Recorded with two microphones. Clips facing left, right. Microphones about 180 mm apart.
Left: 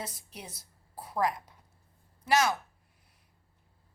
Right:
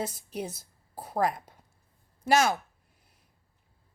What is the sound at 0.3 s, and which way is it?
A woman's voice, 50° right (ahead or behind).